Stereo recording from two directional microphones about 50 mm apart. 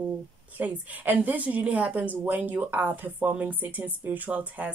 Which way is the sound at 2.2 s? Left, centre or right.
Right.